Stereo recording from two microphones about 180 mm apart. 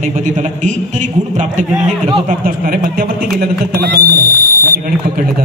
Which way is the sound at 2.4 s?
55° right (ahead or behind).